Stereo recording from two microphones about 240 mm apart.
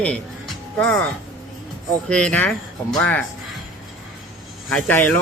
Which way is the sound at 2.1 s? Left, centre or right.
Centre.